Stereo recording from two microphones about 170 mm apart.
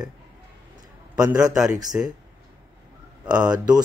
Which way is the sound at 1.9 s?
10° right (ahead or behind).